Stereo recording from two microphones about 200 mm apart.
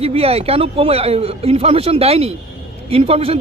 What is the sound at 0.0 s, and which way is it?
Speech, 30° right (ahead or behind).